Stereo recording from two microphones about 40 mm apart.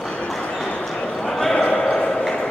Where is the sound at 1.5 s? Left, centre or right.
Left.